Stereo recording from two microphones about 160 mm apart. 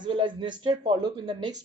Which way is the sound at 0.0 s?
30° right (ahead or behind).